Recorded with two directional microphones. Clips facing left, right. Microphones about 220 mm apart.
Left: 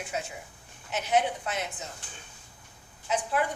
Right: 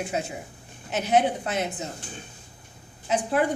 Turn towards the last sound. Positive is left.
turn(degrees=-30)  # may be behind; listen again after turning